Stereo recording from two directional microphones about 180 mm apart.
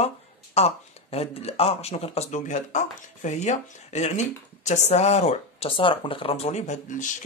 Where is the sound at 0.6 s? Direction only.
35° left (ahead or behind).